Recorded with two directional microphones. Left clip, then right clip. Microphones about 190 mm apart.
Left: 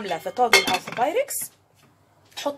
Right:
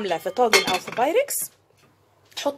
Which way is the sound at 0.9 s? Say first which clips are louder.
Right 4 dB; 45° right (ahead or behind).